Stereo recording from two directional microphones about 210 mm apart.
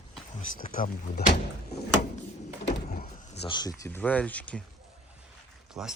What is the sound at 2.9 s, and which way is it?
Speech, 35° left (ahead or behind).